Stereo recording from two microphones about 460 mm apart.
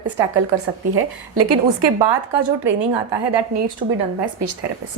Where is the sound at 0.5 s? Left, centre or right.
Right.